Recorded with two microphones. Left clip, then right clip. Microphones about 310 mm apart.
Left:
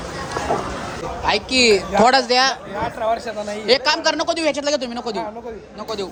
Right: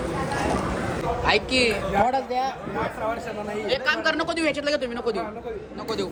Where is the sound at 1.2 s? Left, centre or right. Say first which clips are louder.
Left 5 dB; centre.